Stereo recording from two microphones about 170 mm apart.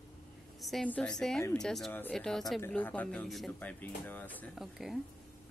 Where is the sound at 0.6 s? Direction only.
5° left (ahead or behind).